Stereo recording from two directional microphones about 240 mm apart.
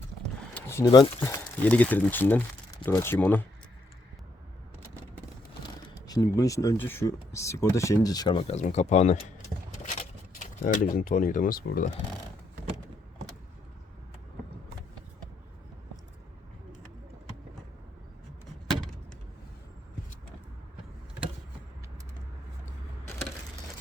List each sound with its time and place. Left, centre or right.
0.5 s speech: centre
5.6 s speech: centre
10.4 s speech: left